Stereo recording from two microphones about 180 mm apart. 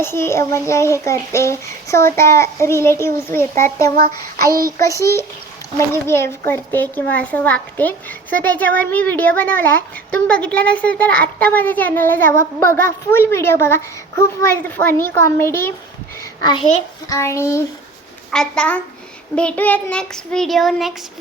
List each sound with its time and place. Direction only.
0.0 s a child's voice: 15° left (ahead or behind)
5.9 s a child's voice: 15° left (ahead or behind)
16.4 s a child's voice: 25° left (ahead or behind)
17.1 s a child's voice: 15° left (ahead or behind)
18.3 s child singing: 5° left (ahead or behind)